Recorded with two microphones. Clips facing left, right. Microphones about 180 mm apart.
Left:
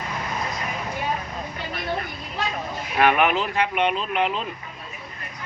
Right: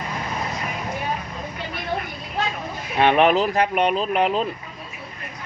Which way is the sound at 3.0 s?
30° right (ahead or behind).